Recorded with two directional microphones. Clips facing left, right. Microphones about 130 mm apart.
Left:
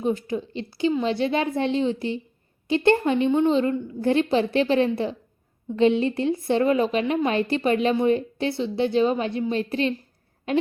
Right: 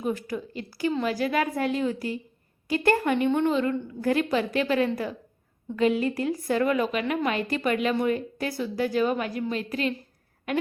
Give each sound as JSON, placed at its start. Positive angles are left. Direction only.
{"t": 0.0, "sound": "a woman's voice", "side_deg": 25}